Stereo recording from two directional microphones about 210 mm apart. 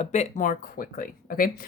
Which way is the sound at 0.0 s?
35° left (ahead or behind).